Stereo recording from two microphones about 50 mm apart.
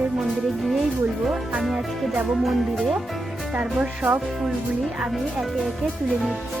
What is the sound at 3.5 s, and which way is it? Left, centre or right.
Music, right.